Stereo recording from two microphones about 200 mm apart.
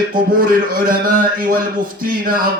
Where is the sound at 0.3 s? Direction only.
45° right (ahead or behind).